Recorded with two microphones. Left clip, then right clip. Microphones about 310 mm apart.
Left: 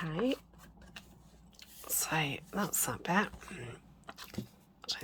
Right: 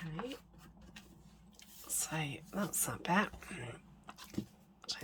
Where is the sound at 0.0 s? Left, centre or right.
Centre.